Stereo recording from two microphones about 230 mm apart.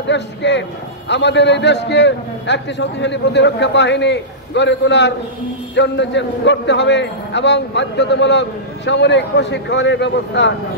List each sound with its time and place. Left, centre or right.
0.1 s a man's voice: left